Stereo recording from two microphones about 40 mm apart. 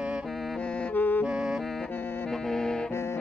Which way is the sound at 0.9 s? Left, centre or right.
Left.